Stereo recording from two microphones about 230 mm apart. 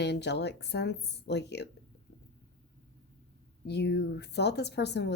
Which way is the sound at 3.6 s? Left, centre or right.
Left.